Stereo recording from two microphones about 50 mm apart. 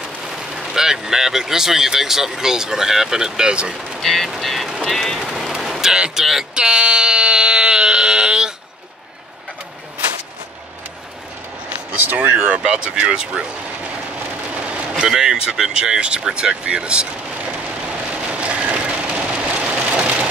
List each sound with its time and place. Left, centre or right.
0.6 s speech: centre
4.0 s speech: centre
5.6 s a sound: centre
11.7 s vehicle: right
12.4 s speech: right
14.2 s rain on surface: right
15.0 s speech: centre; by 18.2 s right
18.4 s a sound: right